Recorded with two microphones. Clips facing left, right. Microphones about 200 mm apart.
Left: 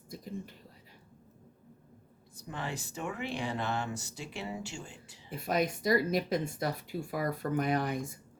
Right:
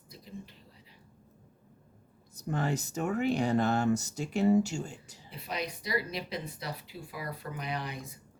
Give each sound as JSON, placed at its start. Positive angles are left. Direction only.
{"t": 0.1, "sound": "whispering", "side_deg": 45}
{"t": 2.3, "sound": "speech", "side_deg": -45}
{"t": 5.3, "sound": "speech", "side_deg": 45}